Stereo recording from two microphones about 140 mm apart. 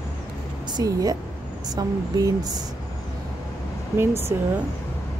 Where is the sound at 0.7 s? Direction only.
30° right (ahead or behind).